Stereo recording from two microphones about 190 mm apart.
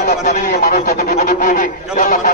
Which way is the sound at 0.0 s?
45° left (ahead or behind).